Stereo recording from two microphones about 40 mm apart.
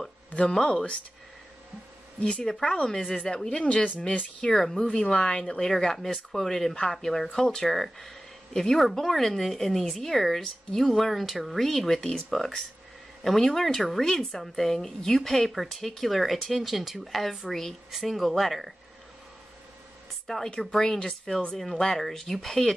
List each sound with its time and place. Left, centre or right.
0.5 s speech: centre
2.1 s speech: left
4.5 s speech: centre
4.8 s speech: left; by 18.7 s centre
20.2 s a woman's voice: centre
20.5 s speech: centre